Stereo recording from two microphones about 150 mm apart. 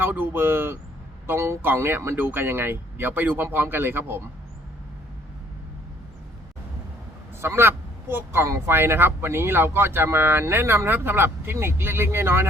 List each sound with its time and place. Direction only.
0.0 s speech: 15° right (ahead or behind)
7.4 s speech: 15° right (ahead or behind)